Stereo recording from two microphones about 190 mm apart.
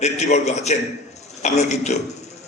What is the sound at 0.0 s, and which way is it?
A man's voice, 35° left (ahead or behind).